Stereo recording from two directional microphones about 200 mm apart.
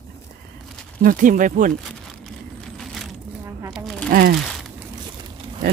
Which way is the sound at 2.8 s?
Centre (ahead or behind).